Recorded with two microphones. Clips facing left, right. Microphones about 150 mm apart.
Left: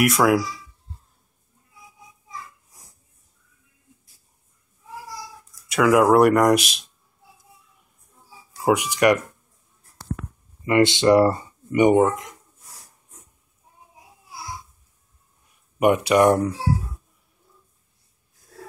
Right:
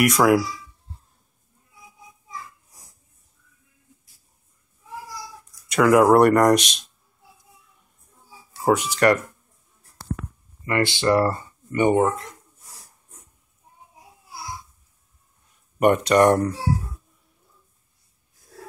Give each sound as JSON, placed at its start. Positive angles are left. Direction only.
{"t": 0.0, "sound": "speech", "side_deg": 0}
{"t": 5.7, "sound": "speech", "side_deg": 0}
{"t": 8.6, "sound": "speech", "side_deg": 15}
{"t": 10.6, "sound": "speech", "side_deg": 20}
{"t": 15.8, "sound": "speech", "side_deg": 5}